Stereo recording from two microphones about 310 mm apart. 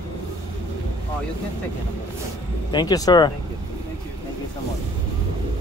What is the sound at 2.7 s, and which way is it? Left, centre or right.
Speech, centre.